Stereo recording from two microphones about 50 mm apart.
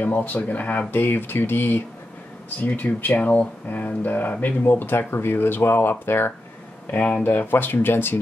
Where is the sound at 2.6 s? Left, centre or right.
Left.